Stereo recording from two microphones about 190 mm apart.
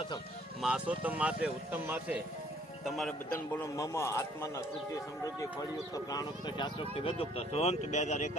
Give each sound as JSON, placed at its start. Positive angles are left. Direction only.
{"t": 0.6, "sound": "speech", "side_deg": -5}
{"t": 3.3, "sound": "a man's voice", "side_deg": 10}
{"t": 5.9, "sound": "speech", "side_deg": 20}